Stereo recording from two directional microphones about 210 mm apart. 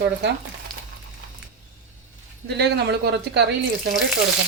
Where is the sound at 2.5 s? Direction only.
50° right (ahead or behind).